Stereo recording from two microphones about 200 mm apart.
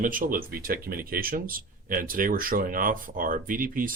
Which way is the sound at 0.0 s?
45° right (ahead or behind).